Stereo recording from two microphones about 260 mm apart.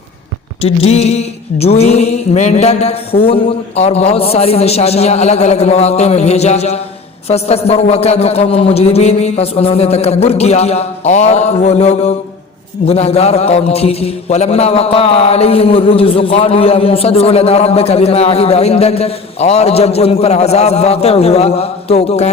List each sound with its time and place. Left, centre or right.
0.6 s a man's voice: left